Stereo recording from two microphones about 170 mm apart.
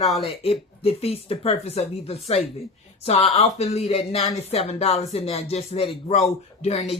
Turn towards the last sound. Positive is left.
turn(degrees=35)  # may be behind; listen again after turning